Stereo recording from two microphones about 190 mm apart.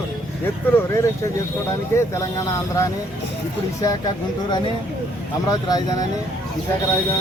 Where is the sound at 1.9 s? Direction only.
15° left (ahead or behind).